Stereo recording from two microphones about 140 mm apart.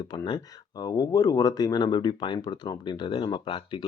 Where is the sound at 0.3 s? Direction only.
30° left (ahead or behind).